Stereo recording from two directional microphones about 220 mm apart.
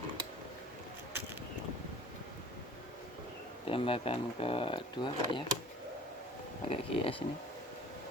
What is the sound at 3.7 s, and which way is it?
Speech, 25° left (ahead or behind).